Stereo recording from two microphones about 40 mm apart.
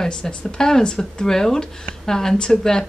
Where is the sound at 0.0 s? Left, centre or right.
Left.